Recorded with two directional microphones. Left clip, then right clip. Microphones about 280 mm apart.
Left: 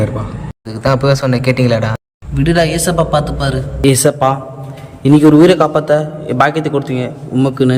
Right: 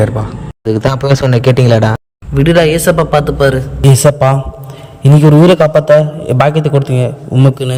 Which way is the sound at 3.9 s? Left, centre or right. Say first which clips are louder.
Right 4 dB; right.